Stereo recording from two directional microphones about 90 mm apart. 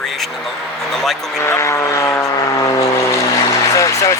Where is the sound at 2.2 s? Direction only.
45° left (ahead or behind).